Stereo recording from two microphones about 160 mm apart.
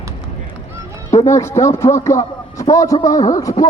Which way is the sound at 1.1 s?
15° left (ahead or behind).